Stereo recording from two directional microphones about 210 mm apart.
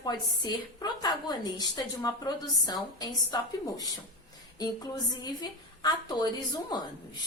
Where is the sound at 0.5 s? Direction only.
20° left (ahead or behind).